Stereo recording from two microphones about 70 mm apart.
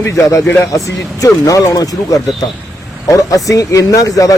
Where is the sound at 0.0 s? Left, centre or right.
Left.